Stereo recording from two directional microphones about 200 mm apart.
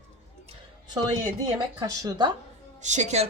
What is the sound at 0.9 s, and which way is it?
Speech, 20° right (ahead or behind).